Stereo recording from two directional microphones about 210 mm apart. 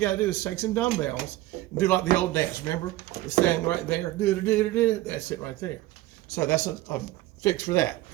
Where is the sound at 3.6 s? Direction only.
10° left (ahead or behind).